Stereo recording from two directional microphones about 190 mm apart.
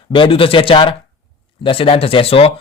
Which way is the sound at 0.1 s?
25° left (ahead or behind).